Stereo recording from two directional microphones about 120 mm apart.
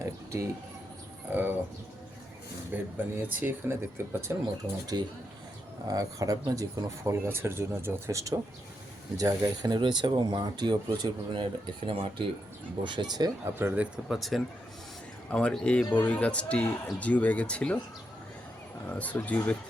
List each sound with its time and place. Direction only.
0.0 s speech: 25° right (ahead or behind)
1.3 s speech: 15° right (ahead or behind)
2.7 s speech: 15° right (ahead or behind)
4.9 s speech: 35° right (ahead or behind)
7.0 s speech: 20° right (ahead or behind); by 12.1 s 50° right (ahead or behind)
12.8 s speech: 40° right (ahead or behind)
13.4 s speech: 20° right (ahead or behind)
13.9 s a man's voice: centre (ahead or behind)
18.9 s a man's voice: 15° left (ahead or behind)